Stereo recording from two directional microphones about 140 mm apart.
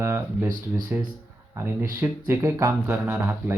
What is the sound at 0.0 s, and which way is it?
Speech, 20° right (ahead or behind).